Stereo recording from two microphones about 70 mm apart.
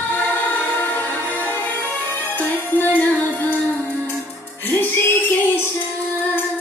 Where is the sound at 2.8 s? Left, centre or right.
Left.